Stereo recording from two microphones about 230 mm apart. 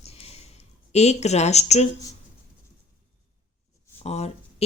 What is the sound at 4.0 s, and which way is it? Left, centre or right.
Speech, left.